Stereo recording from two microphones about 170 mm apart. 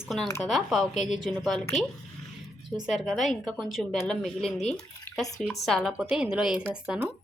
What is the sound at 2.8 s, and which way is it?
Speech, centre (ahead or behind).